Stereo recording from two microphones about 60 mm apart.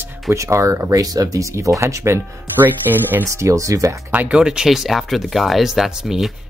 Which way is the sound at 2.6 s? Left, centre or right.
Right.